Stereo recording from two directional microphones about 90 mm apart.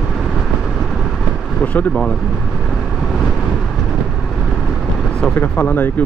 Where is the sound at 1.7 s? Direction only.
10° left (ahead or behind).